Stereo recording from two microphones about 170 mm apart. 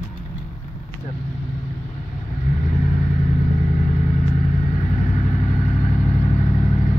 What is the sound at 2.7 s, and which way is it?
Vehicle, 40° left (ahead or behind).